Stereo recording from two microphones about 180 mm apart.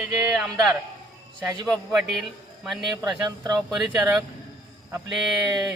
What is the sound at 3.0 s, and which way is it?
Speech, 20° right (ahead or behind).